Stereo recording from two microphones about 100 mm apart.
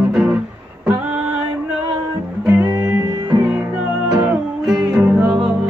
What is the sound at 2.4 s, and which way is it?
Music, 30° right (ahead or behind).